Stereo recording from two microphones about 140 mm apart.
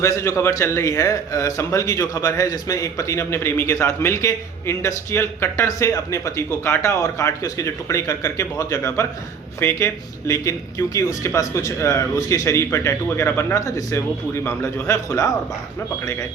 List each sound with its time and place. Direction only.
0.0 s a man's voice: 20° left (ahead or behind)